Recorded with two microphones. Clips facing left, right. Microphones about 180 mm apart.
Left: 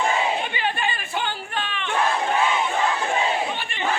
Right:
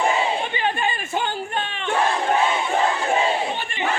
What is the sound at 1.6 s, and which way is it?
Battle cry, 30° right (ahead or behind).